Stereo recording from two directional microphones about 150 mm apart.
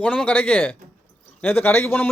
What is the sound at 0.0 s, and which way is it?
A man's voice, 10° left (ahead or behind).